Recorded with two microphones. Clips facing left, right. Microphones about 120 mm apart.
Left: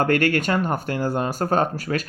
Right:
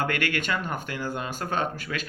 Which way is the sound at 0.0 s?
45° left (ahead or behind).